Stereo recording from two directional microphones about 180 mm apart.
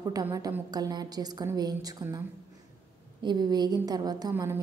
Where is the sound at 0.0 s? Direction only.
20° right (ahead or behind).